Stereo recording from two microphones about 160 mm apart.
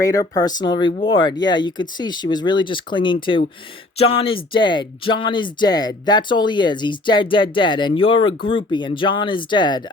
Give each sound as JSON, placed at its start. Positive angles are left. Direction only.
{"t": 0.0, "sound": "speech", "side_deg": 20}